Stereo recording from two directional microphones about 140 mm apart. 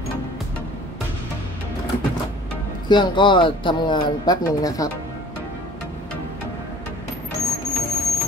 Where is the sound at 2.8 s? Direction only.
30° left (ahead or behind).